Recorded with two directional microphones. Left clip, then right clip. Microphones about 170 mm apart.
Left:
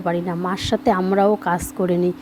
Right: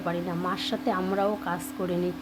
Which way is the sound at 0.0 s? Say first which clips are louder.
Left 7 dB; 30° left (ahead or behind).